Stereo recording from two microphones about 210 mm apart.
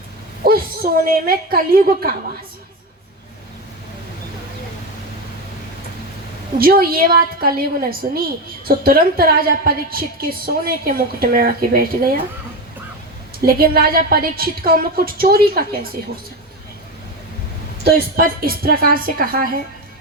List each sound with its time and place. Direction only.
0.4 s a woman's voice: 45° right (ahead or behind)
6.6 s a woman's voice: 45° right (ahead or behind)
13.4 s a woman's voice: 45° right (ahead or behind)
17.8 s a woman's voice: 45° right (ahead or behind)